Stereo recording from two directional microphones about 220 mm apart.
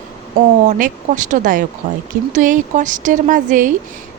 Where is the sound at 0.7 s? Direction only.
35° right (ahead or behind).